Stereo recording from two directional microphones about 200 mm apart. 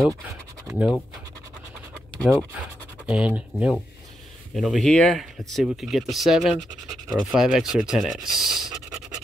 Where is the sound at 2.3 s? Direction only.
5° right (ahead or behind).